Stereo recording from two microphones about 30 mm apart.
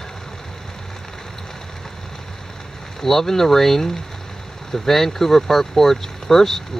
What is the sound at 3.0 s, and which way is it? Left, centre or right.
Speech, centre.